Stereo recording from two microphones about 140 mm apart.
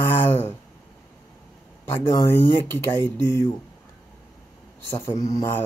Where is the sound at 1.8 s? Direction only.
15° left (ahead or behind).